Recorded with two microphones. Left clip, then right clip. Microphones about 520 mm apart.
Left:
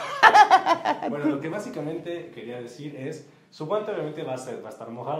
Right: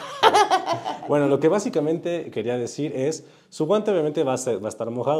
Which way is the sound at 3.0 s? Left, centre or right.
Right.